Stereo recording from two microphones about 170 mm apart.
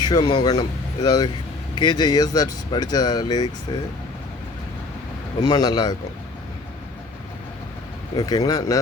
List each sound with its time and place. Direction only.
0.0 s speech: 25° left (ahead or behind)
5.4 s speech: 20° left (ahead or behind)
8.2 s speech: 20° left (ahead or behind)